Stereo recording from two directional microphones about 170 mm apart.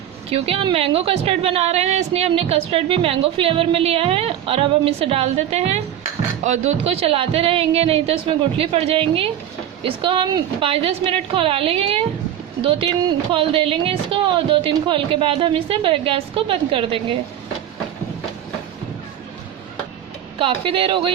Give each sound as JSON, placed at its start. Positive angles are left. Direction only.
{"t": 0.3, "sound": "a woman's voice", "side_deg": -35}
{"t": 13.3, "sound": "a woman's voice", "side_deg": -30}
{"t": 20.4, "sound": "a woman's voice", "side_deg": -30}